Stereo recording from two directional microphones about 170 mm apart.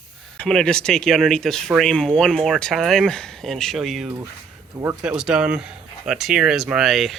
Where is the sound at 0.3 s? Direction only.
5° left (ahead or behind).